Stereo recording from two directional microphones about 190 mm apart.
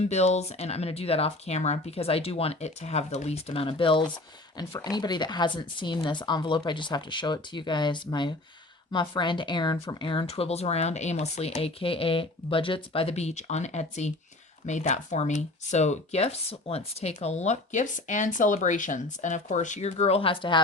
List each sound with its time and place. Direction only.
0.0 s speech: 35° left (ahead or behind)